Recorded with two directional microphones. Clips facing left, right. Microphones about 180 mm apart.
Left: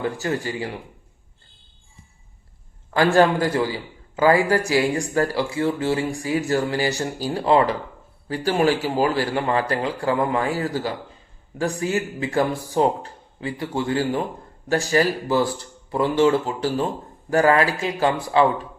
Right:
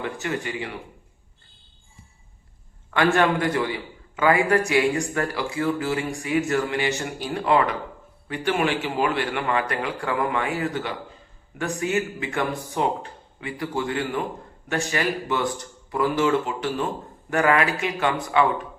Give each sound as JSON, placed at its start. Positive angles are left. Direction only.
{"t": 0.0, "sound": "a man's voice", "side_deg": 35}
{"t": 2.9, "sound": "a man's voice", "side_deg": 30}